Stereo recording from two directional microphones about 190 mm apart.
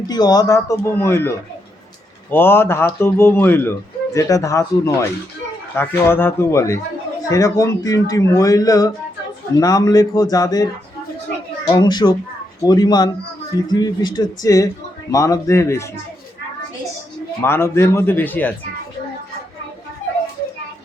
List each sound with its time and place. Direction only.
0.1 s a man's voice: 20° left (ahead or behind)
2.3 s a man's voice: 10° left (ahead or behind)
11.7 s a man's voice: 20° left (ahead or behind)
17.4 s a man's voice: 15° left (ahead or behind)